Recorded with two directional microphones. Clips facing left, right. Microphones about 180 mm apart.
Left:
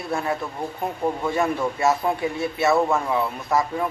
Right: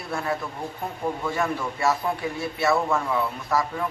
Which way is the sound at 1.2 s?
20° left (ahead or behind).